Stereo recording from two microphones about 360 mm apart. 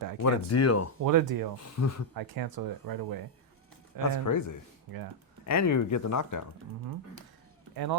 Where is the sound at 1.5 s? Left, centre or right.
Left.